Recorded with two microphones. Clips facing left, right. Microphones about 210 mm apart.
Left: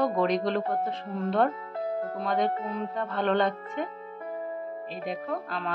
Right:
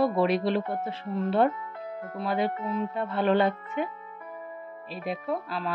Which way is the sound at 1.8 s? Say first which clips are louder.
Left 8 dB; 35° left (ahead or behind).